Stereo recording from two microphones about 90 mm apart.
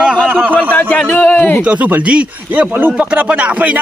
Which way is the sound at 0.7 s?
15° left (ahead or behind).